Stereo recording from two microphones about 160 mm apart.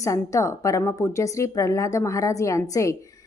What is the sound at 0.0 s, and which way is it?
A woman's voice, 20° left (ahead or behind).